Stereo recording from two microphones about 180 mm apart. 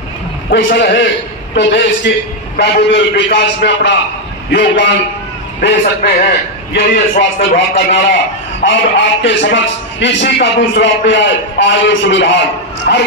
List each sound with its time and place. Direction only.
0.7 s a man's voice: 80° left
8.6 s a man's voice: 90° left; by 13.0 s 75° left (ahead or behind)